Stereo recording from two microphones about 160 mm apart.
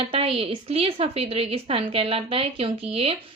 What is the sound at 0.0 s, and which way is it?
Speech, 35° right (ahead or behind).